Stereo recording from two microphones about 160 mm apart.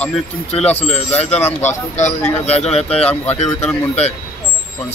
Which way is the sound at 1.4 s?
15° left (ahead or behind).